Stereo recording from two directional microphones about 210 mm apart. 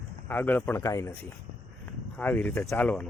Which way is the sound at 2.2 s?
5° left (ahead or behind).